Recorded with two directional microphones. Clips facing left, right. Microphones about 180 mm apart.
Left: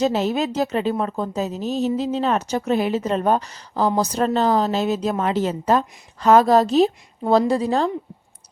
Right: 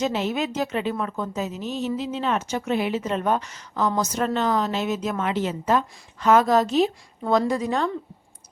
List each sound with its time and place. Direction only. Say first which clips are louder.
0.0 s a woman's voice: left 4 dB; 40° left (ahead or behind)